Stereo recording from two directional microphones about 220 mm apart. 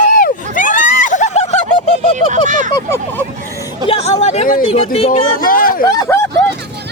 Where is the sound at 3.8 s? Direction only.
25° left (ahead or behind).